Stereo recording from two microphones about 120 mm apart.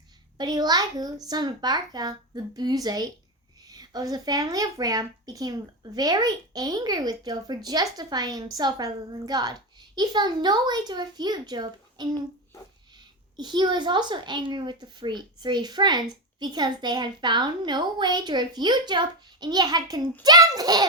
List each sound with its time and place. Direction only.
0.3 s a woman's voice: 35° right (ahead or behind)
13.3 s a woman's voice: 35° right (ahead or behind)